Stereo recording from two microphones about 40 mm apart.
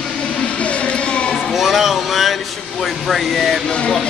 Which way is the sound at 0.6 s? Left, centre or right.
Left.